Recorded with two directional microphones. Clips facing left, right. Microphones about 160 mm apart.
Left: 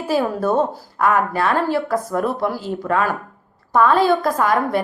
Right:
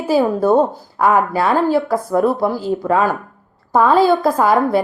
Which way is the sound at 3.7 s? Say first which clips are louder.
Right 3 dB; 25° right (ahead or behind).